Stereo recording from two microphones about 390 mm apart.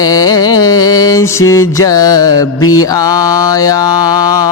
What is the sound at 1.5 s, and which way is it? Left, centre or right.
Mantra, centre.